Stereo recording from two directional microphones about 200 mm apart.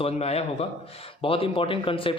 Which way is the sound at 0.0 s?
30° left (ahead or behind).